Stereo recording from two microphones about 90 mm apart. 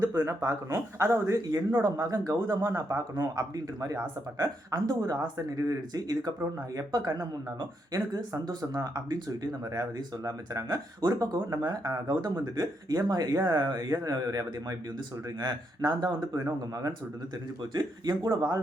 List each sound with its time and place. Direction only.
0.4 s speech: 35° right (ahead or behind)
1.5 s speech: 40° right (ahead or behind)
17.7 s speech: 55° right (ahead or behind)